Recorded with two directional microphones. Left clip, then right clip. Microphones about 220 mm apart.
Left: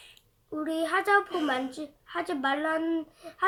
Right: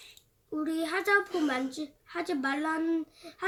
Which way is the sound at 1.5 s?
Centre (ahead or behind).